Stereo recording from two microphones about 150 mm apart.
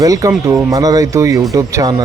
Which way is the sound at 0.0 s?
25° right (ahead or behind).